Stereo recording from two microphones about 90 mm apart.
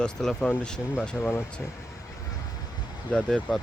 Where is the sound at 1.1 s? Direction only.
25° left (ahead or behind).